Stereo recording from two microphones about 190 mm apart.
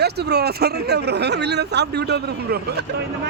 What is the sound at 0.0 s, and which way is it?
Speech, 60° right (ahead or behind).